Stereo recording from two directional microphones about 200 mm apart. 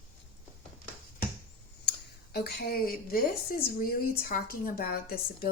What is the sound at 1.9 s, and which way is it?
A woman's voice, 50° left (ahead or behind).